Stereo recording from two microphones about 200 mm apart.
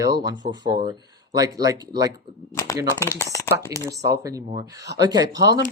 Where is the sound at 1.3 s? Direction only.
20° right (ahead or behind).